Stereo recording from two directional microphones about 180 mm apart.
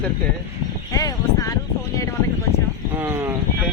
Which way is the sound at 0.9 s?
20° left (ahead or behind).